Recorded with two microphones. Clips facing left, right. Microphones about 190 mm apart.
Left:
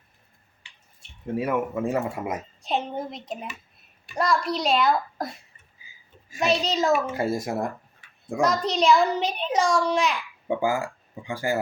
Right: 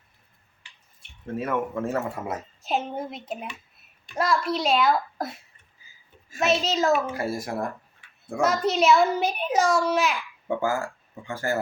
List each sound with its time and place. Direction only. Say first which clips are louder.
1.4 s speech: left 2 dB; 10° left (ahead or behind)
2.6 s a child's voice: right 1 dB; 5° right (ahead or behind)
6.4 s a child's voice: even; centre (ahead or behind)
7.1 s speech: left 3 dB; 25° left (ahead or behind)
8.4 s a child's voice: right 1 dB; 5° right (ahead or behind)
10.5 s speech: left 1 dB; 15° left (ahead or behind)